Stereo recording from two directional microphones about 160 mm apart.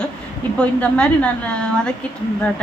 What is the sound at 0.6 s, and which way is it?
A woman's voice, 5° left (ahead or behind).